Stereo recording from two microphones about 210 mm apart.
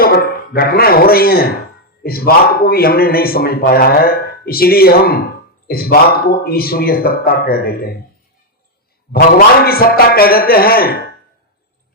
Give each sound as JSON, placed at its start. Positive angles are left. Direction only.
{"t": 0.0, "sound": "a man's voice", "side_deg": 45}
{"t": 9.6, "sound": "a man's voice", "side_deg": 45}